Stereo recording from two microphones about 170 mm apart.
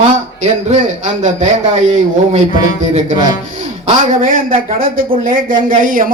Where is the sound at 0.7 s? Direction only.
45° right (ahead or behind).